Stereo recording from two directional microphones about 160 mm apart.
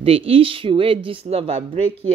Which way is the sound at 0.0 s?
35° right (ahead or behind).